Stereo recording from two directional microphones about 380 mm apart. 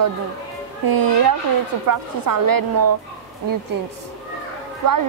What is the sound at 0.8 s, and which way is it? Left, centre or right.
A woman's voice, right.